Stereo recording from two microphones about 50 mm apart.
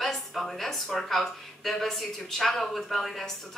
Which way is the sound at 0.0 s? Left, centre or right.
Centre.